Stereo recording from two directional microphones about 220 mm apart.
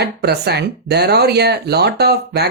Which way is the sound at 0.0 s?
50° right (ahead or behind).